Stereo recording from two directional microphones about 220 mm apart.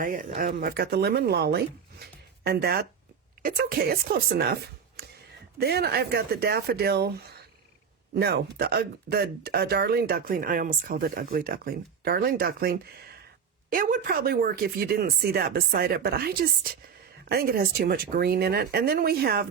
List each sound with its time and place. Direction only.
0.0 s speech: 40° right (ahead or behind)
8.1 s speech: 45° right (ahead or behind)